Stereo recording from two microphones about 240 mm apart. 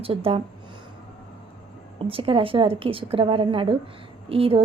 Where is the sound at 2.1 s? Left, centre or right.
Right.